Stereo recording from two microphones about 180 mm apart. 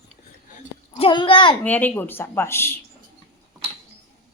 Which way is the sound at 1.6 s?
10° left (ahead or behind).